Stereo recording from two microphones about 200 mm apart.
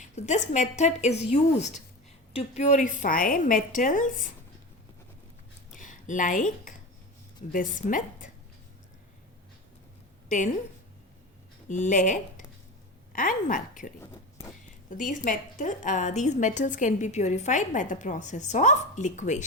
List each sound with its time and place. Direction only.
0.0 s a woman's voice: 35° left (ahead or behind)
5.7 s a woman's voice: 40° left (ahead or behind)
11.7 s a woman's voice: 40° left (ahead or behind)
14.0 s a sound: 15° left (ahead or behind)
14.8 s a woman's voice: 40° left (ahead or behind)